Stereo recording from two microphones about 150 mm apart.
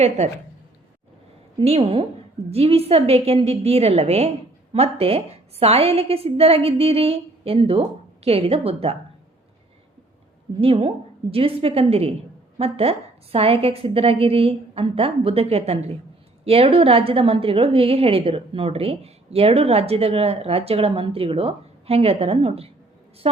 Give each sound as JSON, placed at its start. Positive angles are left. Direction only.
{"t": 0.2, "sound": "a woman's voice", "side_deg": -45}
{"t": 1.5, "sound": "a woman's voice", "side_deg": -40}
{"t": 10.6, "sound": "a woman's voice", "side_deg": -35}